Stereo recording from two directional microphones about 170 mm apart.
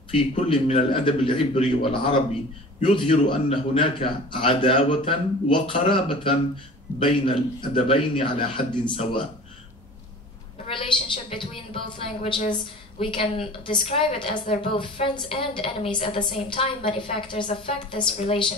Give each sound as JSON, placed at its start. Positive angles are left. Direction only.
{"t": 0.1, "sound": "a woman's voice", "side_deg": 35}
{"t": 10.7, "sound": "a woman's voice", "side_deg": 30}